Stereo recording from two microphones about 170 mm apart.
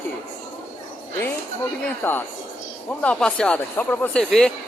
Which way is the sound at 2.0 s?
15° left (ahead or behind).